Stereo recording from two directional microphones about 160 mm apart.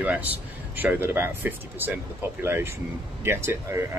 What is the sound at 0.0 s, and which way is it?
Speech, 10° right (ahead or behind).